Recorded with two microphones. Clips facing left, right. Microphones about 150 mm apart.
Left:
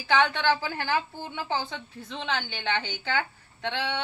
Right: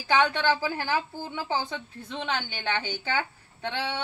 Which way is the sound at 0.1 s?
10° right (ahead or behind).